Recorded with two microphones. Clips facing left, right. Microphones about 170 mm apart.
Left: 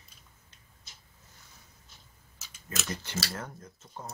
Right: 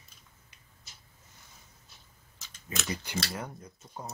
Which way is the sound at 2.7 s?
10° right (ahead or behind).